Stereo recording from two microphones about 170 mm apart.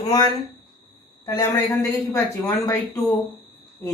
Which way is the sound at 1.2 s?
15° left (ahead or behind).